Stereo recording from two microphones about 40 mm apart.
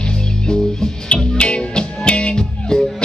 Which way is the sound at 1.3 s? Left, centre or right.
Left.